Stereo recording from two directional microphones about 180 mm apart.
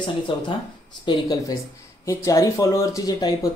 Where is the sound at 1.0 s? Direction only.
25° left (ahead or behind).